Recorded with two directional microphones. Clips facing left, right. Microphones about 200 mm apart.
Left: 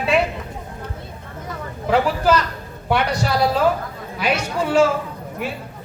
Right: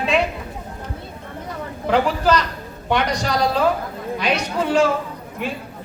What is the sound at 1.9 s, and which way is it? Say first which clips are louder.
Speech: even; 5° left (ahead or behind).